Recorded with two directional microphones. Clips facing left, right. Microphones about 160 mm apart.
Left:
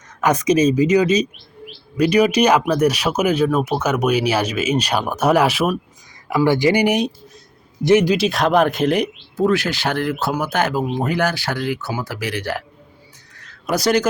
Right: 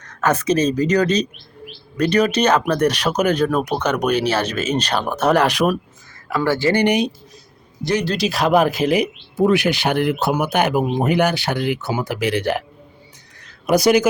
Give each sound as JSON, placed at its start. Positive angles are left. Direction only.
{"t": 0.0, "sound": "speech", "side_deg": 10}
{"t": 6.2, "sound": "speech", "side_deg": 15}
{"t": 8.1, "sound": "speech", "side_deg": 0}
{"t": 13.7, "sound": "speech", "side_deg": -15}